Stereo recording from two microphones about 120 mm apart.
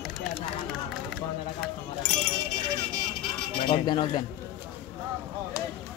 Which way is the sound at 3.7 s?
40° left (ahead or behind).